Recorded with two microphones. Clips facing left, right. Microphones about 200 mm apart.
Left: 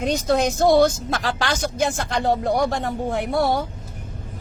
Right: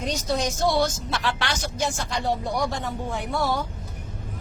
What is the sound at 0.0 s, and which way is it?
Speech, 55° left (ahead or behind).